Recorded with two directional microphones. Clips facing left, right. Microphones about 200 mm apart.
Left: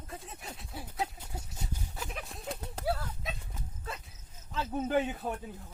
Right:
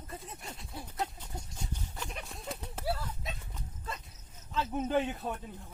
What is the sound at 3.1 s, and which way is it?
Livestock, 5° left (ahead or behind).